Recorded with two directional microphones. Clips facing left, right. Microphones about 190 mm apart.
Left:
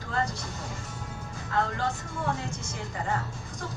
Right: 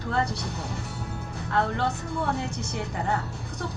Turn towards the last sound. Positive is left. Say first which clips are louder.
# right 4 dB
turn(degrees=-65)  # may be behind; listen again after turning